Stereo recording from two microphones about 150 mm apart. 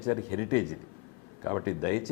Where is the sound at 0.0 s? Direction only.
20° left (ahead or behind).